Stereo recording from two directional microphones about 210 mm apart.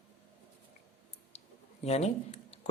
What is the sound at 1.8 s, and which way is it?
Speech, 30° left (ahead or behind).